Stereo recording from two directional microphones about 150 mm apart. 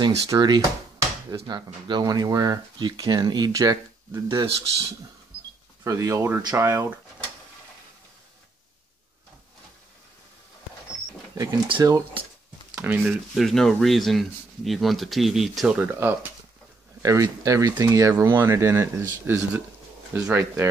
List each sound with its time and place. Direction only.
0.0 s speech: 30° right (ahead or behind)
5.9 s speech: 20° right (ahead or behind)
11.3 s speech: 25° right (ahead or behind)
12.7 s speech: 10° right (ahead or behind)
13.3 s speech: centre (ahead or behind); by 20.6 s 15° right (ahead or behind)